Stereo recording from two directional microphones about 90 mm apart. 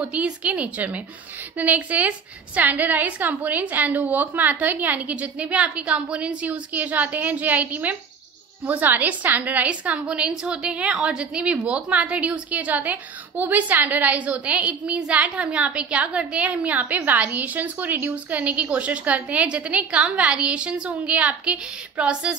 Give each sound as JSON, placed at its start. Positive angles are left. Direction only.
{"t": 0.0, "sound": "a woman's voice", "side_deg": -15}